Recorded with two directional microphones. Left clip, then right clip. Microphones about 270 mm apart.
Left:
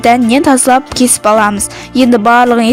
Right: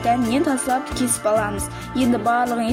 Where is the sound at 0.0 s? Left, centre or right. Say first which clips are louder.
Left 11 dB; left.